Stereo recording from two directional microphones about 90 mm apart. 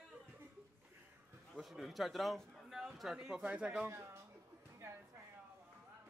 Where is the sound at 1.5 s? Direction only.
Centre (ahead or behind).